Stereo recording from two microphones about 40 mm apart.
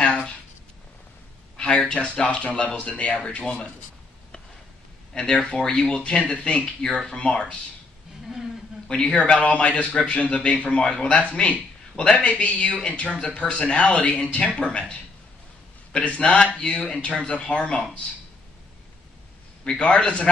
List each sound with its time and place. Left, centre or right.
0.0 s a sound: left
1.6 s a man's voice: left
5.1 s a man's voice: centre
8.8 s a man's voice: left
19.6 s a man's voice: left